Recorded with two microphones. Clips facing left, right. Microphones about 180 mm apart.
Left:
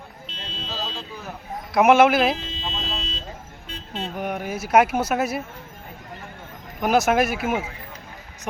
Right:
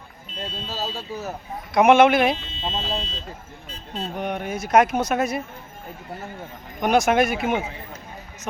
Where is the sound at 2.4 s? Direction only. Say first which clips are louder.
Right 2 dB; 90° left.